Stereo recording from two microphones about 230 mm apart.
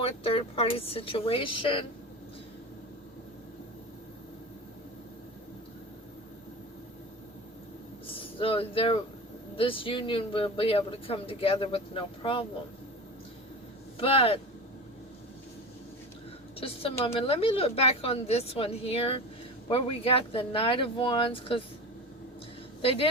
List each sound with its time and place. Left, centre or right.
0.0 s speech: left
8.0 s a sound: left
9.6 s speech: left
14.0 s speech: left
16.6 s a woman's voice: left
22.8 s speech: left